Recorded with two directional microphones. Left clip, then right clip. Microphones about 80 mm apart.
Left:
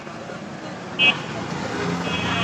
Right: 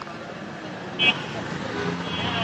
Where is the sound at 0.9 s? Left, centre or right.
Left.